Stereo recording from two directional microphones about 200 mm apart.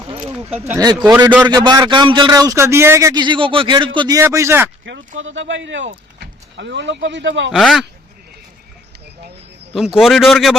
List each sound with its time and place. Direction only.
0.6 s a man's voice: 15° right (ahead or behind)
4.9 s speech: 75° right (ahead or behind)
5.9 s speech: 55° right (ahead or behind)
7.5 s speech: centre (ahead or behind)
9.7 s speech: centre (ahead or behind)